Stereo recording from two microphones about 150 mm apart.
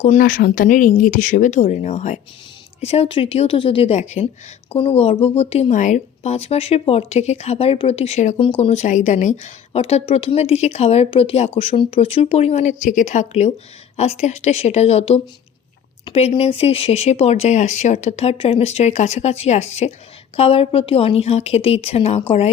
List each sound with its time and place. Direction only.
0.0 s a woman's voice: 60° left (ahead or behind); by 22.2 s 45° left (ahead or behind)